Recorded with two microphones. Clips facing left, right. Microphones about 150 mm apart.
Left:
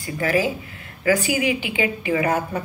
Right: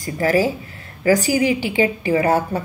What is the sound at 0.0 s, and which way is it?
A woman's voice, 35° right (ahead or behind).